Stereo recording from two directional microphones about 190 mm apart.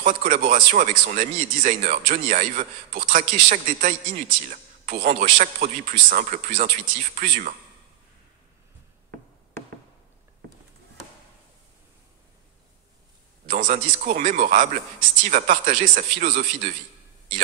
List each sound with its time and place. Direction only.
0.0 s speech: 45° right (ahead or behind)
13.5 s speech: 40° right (ahead or behind)